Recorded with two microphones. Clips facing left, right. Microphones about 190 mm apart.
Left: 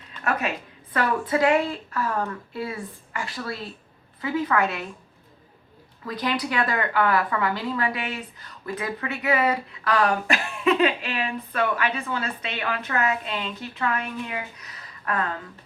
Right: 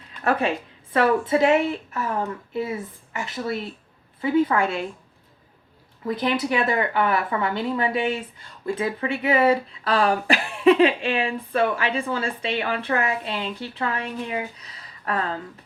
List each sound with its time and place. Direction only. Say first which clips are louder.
0.3 s a woman's voice: right 4 dB; 30° right (ahead or behind)
6.1 s speech: right 4 dB; 25° right (ahead or behind)